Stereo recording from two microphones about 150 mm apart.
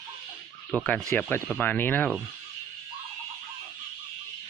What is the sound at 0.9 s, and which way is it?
Speech, 5° left (ahead or behind).